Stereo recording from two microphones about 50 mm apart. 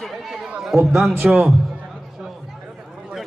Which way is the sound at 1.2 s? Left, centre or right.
Centre.